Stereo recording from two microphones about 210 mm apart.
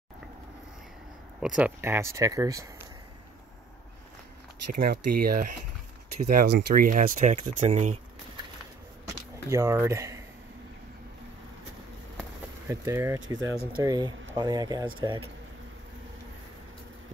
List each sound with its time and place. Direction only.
1.4 s speech: 5° right (ahead or behind)
4.8 s speech: 45° right (ahead or behind)
9.5 s speech: 15° right (ahead or behind)
12.6 s speech: 10° right (ahead or behind)
13.4 s speech: 55° right (ahead or behind)
13.8 s speech: 20° right (ahead or behind)